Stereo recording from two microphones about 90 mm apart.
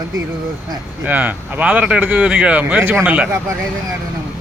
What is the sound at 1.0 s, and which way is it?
Speech, 20° right (ahead or behind).